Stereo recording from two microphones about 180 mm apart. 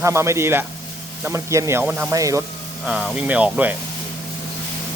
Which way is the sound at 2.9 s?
5° right (ahead or behind).